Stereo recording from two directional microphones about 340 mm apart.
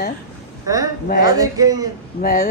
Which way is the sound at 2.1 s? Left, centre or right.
Left.